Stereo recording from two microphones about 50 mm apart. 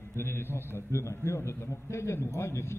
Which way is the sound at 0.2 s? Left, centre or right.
Left.